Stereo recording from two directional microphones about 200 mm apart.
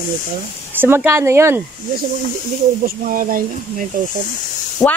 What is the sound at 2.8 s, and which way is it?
Speech, 45° right (ahead or behind).